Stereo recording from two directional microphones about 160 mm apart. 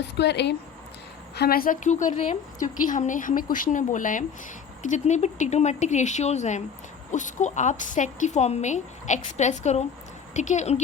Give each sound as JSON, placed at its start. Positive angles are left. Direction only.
{"t": 0.0, "sound": "speech", "side_deg": 90}
{"t": 1.4, "sound": "a woman's voice", "side_deg": 70}